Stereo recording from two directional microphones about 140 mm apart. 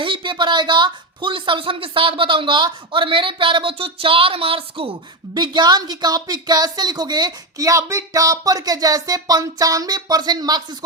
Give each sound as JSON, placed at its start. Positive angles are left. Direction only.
{"t": 0.0, "sound": "speech", "side_deg": -35}